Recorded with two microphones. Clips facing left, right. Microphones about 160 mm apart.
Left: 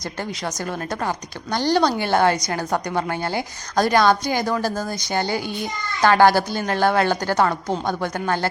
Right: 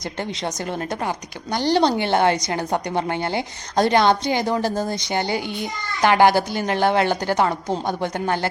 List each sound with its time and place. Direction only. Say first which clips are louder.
0.0 s a woman's voice: right 1 dB; 20° right (ahead or behind)